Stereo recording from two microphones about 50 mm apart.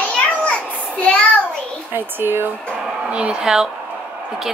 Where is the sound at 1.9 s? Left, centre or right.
Right.